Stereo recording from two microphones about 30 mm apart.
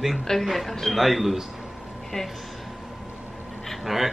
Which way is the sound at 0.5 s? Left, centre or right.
Centre.